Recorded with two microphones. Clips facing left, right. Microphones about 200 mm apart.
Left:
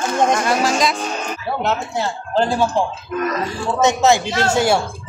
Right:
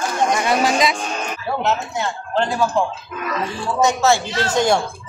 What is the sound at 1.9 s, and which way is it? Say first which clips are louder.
Speech: left 2 dB; 35° left (ahead or behind).